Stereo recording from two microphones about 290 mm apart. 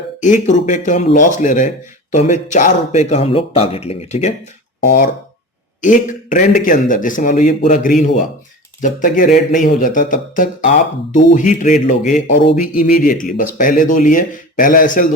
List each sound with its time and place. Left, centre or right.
0.2 s speech: left